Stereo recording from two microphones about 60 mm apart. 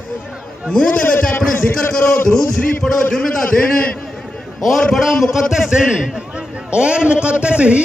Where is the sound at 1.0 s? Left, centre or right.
Left.